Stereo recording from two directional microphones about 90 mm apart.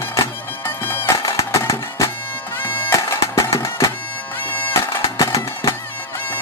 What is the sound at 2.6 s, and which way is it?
Bagpipes, 25° left (ahead or behind).